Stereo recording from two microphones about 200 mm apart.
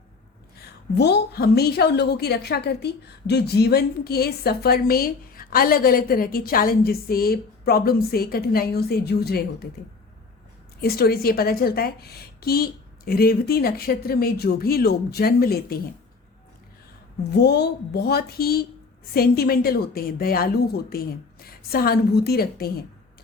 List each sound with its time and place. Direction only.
0.9 s a woman's voice: 55° left (ahead or behind)
10.8 s a woman's voice: 50° left (ahead or behind)
17.3 s a woman's voice: 55° left (ahead or behind)